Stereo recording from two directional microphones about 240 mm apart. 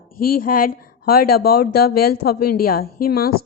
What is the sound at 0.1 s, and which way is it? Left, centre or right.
A woman's voice, left.